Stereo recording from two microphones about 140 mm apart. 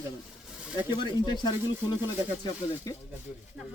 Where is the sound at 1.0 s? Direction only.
30° left (ahead or behind).